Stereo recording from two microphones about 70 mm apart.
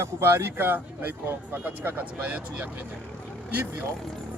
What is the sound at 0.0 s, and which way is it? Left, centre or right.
A man's voice, right.